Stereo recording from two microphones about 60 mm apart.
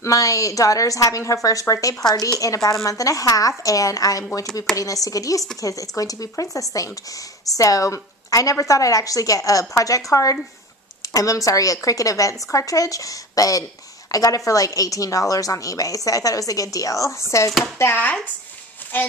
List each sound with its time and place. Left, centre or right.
0.0 s a woman's voice: left
2.3 s a woman's voice: left
17.9 s speech: left
18.9 s a child's voice: left